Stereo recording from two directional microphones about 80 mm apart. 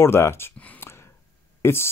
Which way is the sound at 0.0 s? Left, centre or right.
Left.